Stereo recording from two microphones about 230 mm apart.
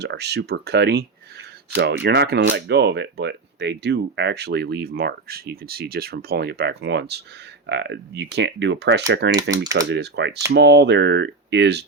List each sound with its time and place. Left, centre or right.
0.0 s speech: right